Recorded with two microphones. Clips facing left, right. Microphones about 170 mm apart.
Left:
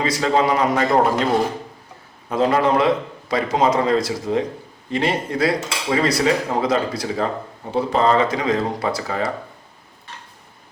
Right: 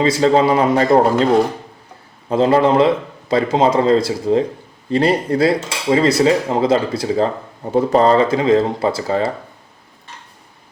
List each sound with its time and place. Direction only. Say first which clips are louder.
0.0 s cutlery: right 5 dB; 30° right (ahead or behind)
2.3 s cutlery: right 4 dB; 30° right (ahead or behind)
7.7 s cutlery: right 5 dB; 45° right (ahead or behind); by 9.3 s 30° right (ahead or behind)